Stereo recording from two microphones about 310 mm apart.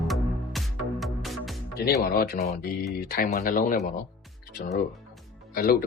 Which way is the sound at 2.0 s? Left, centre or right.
Left.